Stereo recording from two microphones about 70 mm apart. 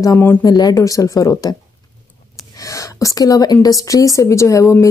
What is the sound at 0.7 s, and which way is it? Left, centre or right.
Speech, left.